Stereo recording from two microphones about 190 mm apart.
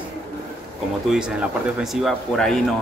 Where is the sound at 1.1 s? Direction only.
5° right (ahead or behind).